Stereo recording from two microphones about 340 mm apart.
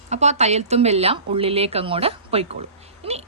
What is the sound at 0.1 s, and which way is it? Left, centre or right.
Speech, centre.